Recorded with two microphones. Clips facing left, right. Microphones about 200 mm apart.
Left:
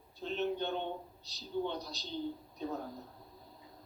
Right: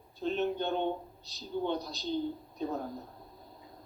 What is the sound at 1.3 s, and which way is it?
A man's voice, 50° right (ahead or behind).